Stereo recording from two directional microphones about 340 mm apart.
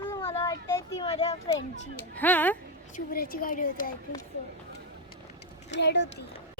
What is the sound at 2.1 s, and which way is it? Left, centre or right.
Speech, centre.